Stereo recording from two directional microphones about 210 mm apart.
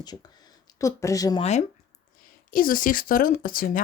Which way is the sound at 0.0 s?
20° left (ahead or behind).